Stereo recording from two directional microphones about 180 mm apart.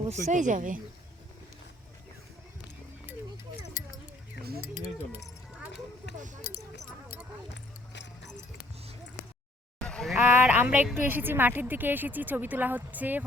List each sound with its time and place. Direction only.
0.1 s speech: 45° right (ahead or behind)
7.5 s music: 75° left (ahead or behind)
9.7 s speech: 5° left (ahead or behind)